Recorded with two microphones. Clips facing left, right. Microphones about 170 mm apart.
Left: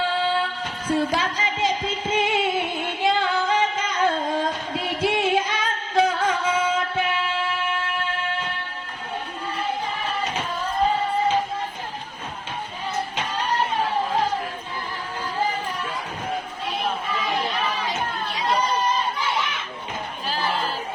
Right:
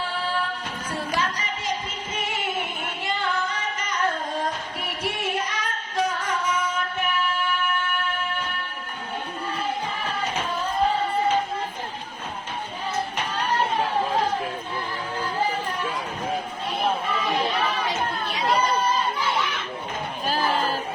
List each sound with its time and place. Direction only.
1.1 s music: 90° left
3.0 s singing: 90° left
20.2 s crowd: 45° right (ahead or behind)